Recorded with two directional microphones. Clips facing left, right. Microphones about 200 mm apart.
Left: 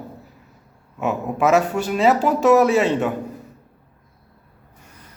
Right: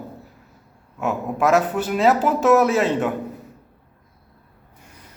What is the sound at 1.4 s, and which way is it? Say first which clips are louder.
A man's voice: left 1 dB; centre (ahead or behind).